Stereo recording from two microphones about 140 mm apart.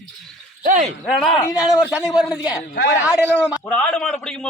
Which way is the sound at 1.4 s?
25° left (ahead or behind).